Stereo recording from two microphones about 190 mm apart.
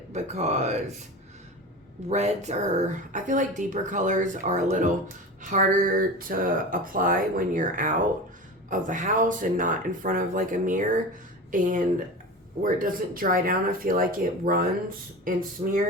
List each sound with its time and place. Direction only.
0.1 s speech: 35° right (ahead or behind)
2.0 s speech: 35° right (ahead or behind)